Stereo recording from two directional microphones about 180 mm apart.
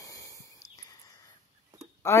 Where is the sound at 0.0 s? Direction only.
20° left (ahead or behind).